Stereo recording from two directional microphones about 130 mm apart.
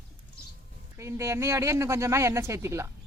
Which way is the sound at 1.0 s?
20° right (ahead or behind).